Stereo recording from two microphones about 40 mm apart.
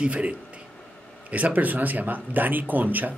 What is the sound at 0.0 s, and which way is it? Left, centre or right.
Speech, right.